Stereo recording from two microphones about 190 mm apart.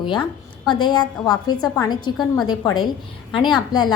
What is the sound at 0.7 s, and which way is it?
A woman's voice, 25° left (ahead or behind).